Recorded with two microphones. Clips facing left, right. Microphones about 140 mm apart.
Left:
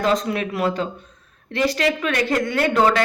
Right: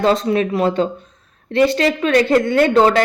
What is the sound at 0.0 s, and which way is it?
A woman's voice, 30° right (ahead or behind).